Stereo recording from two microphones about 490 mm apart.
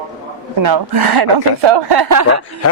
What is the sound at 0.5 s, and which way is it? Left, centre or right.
A woman's voice, right.